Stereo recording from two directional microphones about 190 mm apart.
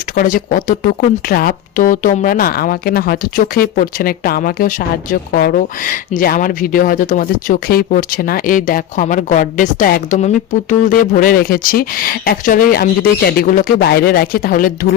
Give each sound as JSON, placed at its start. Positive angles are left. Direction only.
{"t": 0.2, "sound": "speech", "side_deg": 45}